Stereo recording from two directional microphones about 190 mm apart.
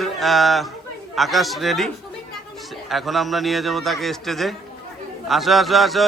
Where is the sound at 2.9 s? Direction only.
Centre (ahead or behind).